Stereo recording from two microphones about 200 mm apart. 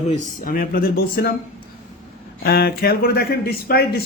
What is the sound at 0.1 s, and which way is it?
Speech, 45° left (ahead or behind).